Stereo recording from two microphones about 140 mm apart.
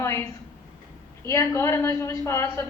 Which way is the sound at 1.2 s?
20° left (ahead or behind).